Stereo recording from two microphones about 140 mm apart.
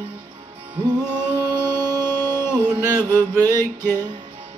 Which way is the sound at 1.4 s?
30° right (ahead or behind).